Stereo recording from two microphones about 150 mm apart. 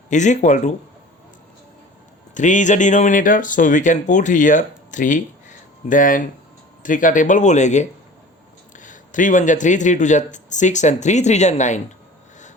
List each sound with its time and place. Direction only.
0.1 s speech: 55° left (ahead or behind)
2.3 s speech: 55° left (ahead or behind)